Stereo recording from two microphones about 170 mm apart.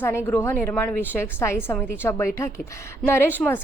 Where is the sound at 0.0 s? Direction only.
15° left (ahead or behind).